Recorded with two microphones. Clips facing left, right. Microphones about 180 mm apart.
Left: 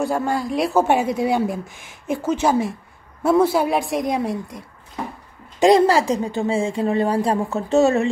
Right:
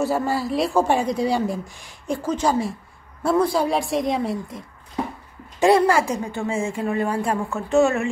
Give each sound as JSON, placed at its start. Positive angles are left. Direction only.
{"t": 0.0, "sound": "a woman's voice", "side_deg": -5}
{"t": 5.6, "sound": "a woman's voice", "side_deg": 15}
{"t": 5.9, "sound": "speech", "side_deg": 35}